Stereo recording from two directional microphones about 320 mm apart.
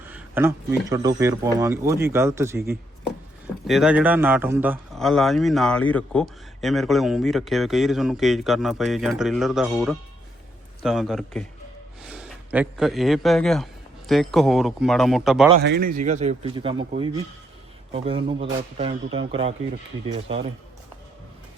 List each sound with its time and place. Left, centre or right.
0.1 s a man's voice: centre
15.5 s a man's voice: right; by 16.8 s centre
17.9 s speech: centre